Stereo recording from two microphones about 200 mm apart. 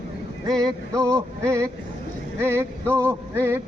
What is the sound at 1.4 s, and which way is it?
Speech, 15° right (ahead or behind).